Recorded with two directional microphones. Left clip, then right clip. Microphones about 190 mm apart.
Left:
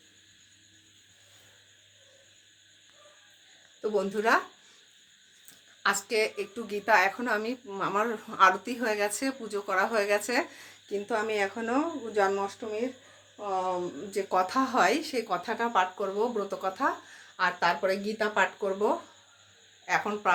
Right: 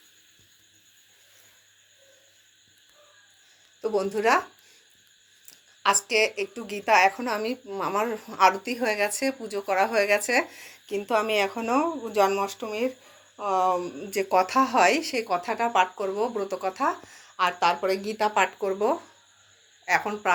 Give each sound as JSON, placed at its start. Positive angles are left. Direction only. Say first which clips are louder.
{"t": 3.8, "sound": "speech", "louder": "right 3 dB", "side_deg": -10}
{"t": 6.1, "sound": "a woman's voice", "louder": "right 5 dB", "side_deg": -10}
{"t": 10.8, "sound": "speech", "louder": "right 5 dB", "side_deg": -15}
{"t": 13.3, "sound": "speech", "louder": "right 7 dB", "side_deg": -40}
{"t": 14.1, "sound": "speech", "louder": "right 5 dB", "side_deg": -15}